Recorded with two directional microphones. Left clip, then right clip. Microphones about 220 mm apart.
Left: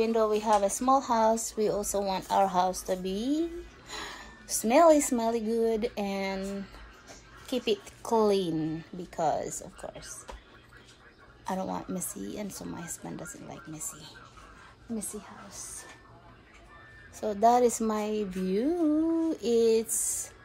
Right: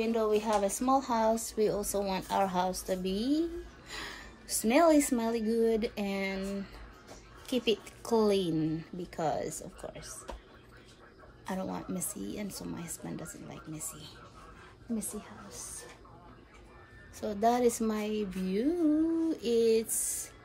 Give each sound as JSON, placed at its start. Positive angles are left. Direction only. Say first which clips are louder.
{"t": 0.0, "sound": "a woman's voice", "louder": "left 3 dB", "side_deg": -5}
{"t": 3.2, "sound": "a woman's voice", "louder": "right 1 dB", "side_deg": 35}
{"t": 3.9, "sound": "a woman's voice", "louder": "left 2 dB", "side_deg": 0}
{"t": 11.4, "sound": "a woman's voice", "louder": "left 4 dB", "side_deg": 0}
{"t": 17.2, "sound": "a woman's voice", "louder": "left 5 dB", "side_deg": 5}